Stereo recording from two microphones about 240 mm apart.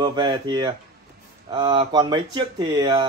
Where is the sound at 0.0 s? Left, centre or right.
Centre.